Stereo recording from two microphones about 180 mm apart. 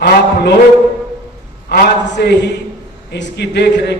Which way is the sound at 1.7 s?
65° left (ahead or behind).